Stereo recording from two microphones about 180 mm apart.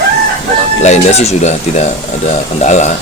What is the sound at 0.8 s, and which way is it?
Speech, 40° left (ahead or behind).